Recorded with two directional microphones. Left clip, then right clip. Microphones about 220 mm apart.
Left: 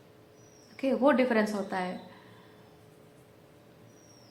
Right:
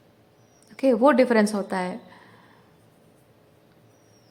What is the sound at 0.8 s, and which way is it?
A woman's voice, 45° right (ahead or behind).